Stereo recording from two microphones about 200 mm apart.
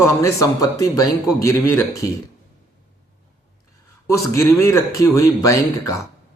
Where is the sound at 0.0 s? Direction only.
15° left (ahead or behind).